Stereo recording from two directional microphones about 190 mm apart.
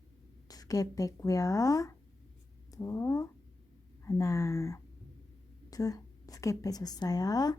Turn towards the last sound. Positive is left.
turn(degrees=20)  # may be behind; listen again after turning